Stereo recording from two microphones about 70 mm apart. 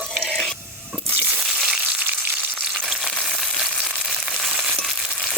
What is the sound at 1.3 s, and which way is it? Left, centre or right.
Crushing, centre.